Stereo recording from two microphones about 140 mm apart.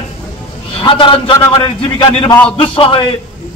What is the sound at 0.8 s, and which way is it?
A man's voice, 35° left (ahead or behind).